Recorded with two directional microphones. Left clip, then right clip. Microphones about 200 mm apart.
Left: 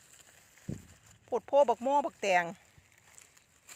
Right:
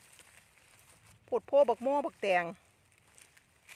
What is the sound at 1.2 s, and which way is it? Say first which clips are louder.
Speech: even; 5° right (ahead or behind).